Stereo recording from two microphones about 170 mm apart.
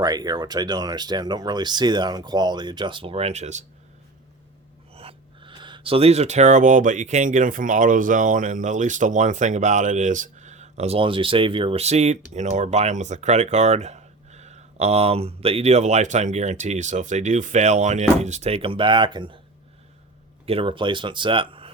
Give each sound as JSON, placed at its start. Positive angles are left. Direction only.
{"t": 0.0, "sound": "speech", "side_deg": -25}
{"t": 4.9, "sound": "speech", "side_deg": -30}
{"t": 20.4, "sound": "speech", "side_deg": -35}